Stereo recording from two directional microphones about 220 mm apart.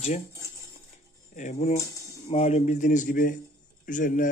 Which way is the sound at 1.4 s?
35° left (ahead or behind).